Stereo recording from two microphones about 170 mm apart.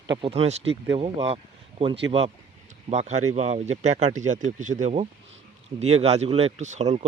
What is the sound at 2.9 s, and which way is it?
Speech, 40° right (ahead or behind).